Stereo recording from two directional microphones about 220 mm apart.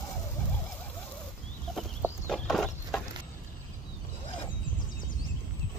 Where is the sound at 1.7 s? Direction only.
Centre (ahead or behind).